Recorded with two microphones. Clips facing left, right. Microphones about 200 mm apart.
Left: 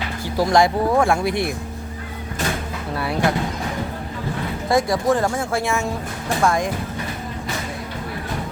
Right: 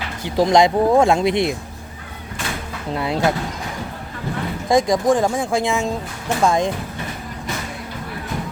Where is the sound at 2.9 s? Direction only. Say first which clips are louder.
Right 3 dB; 20° right (ahead or behind).